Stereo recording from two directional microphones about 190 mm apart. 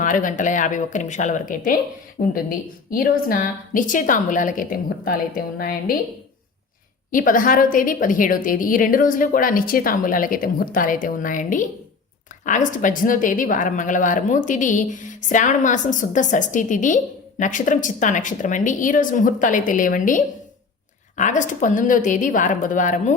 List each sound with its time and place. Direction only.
0.0 s a woman's voice: 45° left (ahead or behind)
7.1 s a woman's voice: 45° left (ahead or behind)